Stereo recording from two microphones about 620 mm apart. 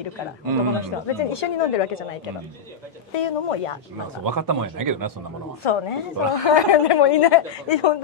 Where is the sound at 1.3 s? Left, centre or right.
Left.